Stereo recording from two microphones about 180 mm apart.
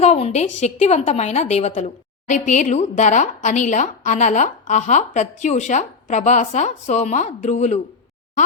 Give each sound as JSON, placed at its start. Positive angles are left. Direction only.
{"t": 0.0, "sound": "a woman's voice", "side_deg": 35}